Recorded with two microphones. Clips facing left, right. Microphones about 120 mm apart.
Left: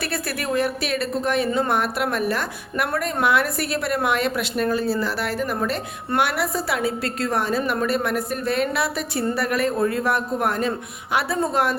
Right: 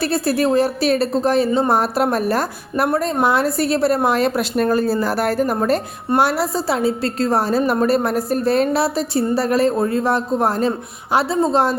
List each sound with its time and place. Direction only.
0.0 s a woman's voice: 30° right (ahead or behind)